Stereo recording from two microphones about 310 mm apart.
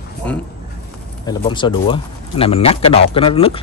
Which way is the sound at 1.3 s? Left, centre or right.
Centre.